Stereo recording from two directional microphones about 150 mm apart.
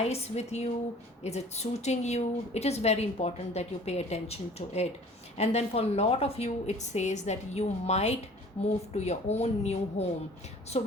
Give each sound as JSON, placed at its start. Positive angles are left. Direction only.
{"t": 0.0, "sound": "a woman's voice", "side_deg": 45}